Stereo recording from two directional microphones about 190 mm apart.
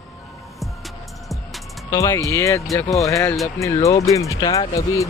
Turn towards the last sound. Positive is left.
turn(degrees=15)  # may be behind; listen again after turning